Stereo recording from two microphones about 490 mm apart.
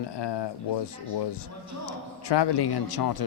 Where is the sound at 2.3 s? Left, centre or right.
Left.